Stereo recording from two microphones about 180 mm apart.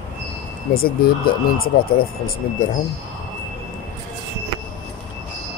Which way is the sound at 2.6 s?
45° left (ahead or behind).